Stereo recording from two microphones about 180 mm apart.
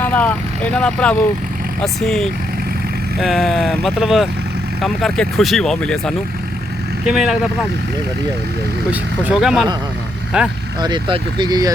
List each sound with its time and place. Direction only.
0.0 s speech: 10° left (ahead or behind)
8.9 s speech: 5° right (ahead or behind)
10.8 s speech: 25° right (ahead or behind)